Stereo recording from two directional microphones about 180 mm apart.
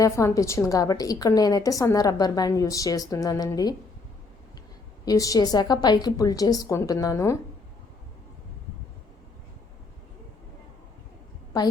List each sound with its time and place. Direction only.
0.0 s a woman's voice: 15° left (ahead or behind)
5.0 s a woman's voice: 20° left (ahead or behind)